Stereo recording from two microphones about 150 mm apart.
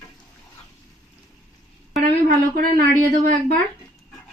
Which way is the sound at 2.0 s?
55° right (ahead or behind).